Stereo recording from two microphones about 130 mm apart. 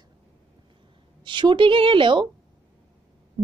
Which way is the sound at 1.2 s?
35° right (ahead or behind).